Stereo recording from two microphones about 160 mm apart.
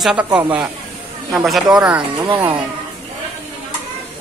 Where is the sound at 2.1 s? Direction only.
30° right (ahead or behind).